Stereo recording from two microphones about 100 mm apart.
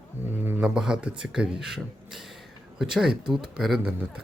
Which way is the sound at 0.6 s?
10° right (ahead or behind).